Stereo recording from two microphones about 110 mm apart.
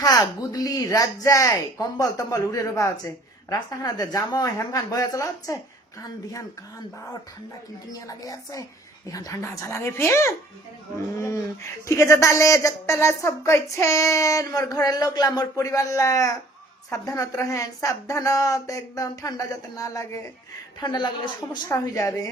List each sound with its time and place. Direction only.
0.0 s a woman's voice: 35° left (ahead or behind)
8.0 s a woman's voice: 30° left (ahead or behind)
20.8 s speech: 45° left (ahead or behind)
21.7 s a woman's voice: 30° left (ahead or behind)